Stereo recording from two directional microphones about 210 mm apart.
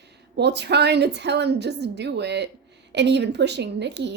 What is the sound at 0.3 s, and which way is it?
A woman's voice, 55° right (ahead or behind).